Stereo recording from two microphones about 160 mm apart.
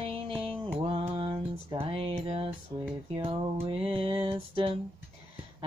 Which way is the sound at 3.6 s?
35° right (ahead or behind).